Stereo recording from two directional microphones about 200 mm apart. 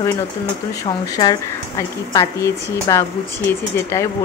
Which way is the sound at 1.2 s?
20° left (ahead or behind).